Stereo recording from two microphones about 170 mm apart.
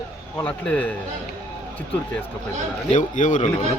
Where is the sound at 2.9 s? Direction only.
45° left (ahead or behind).